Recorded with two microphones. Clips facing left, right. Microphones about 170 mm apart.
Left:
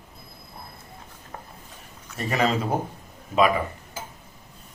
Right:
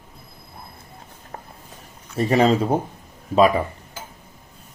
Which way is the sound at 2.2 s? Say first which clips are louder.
Right 7 dB; 30° right (ahead or behind).